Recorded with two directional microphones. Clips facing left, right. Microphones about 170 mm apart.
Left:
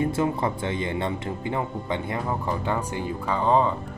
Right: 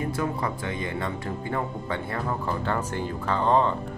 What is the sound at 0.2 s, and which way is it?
Speech, 25° left (ahead or behind).